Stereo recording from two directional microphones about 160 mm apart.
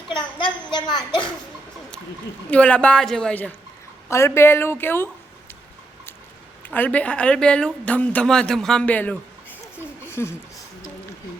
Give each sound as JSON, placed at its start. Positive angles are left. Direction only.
{"t": 0.3, "sound": "a woman's voice", "side_deg": 30}
{"t": 2.5, "sound": "a woman's voice", "side_deg": 10}
{"t": 6.7, "sound": "a woman's voice", "side_deg": 10}
{"t": 10.0, "sound": "a sound", "side_deg": 15}